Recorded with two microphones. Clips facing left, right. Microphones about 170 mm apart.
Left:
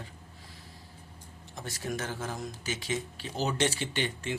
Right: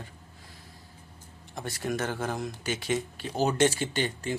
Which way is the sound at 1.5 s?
60° right (ahead or behind).